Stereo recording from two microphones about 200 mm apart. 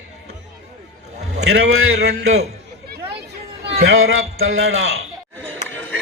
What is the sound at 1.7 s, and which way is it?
Speech, 90° right.